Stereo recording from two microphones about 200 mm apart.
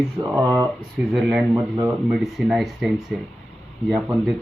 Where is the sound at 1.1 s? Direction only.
Centre (ahead or behind).